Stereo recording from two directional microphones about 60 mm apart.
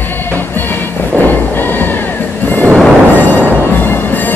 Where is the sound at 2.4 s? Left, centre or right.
Left.